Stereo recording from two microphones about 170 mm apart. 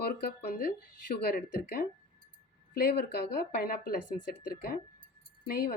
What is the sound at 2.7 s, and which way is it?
Speech, 65° left (ahead or behind).